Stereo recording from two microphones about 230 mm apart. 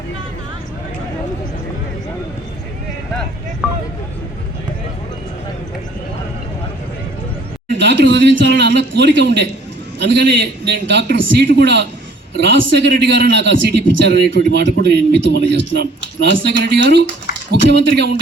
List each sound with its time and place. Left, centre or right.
7.8 s speech: right